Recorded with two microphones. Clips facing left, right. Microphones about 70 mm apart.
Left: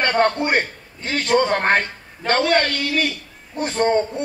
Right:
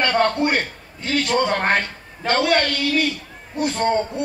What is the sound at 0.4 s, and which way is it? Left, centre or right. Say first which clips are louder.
A man's voice: even; left.